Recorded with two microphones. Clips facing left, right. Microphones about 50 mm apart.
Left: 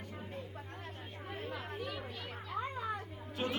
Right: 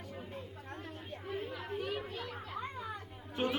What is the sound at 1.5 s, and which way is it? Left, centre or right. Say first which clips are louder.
Chatter: right 2 dB; left.